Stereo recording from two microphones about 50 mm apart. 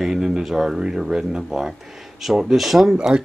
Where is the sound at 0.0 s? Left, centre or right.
Centre.